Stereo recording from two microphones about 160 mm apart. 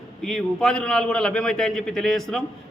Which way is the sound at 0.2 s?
Centre (ahead or behind).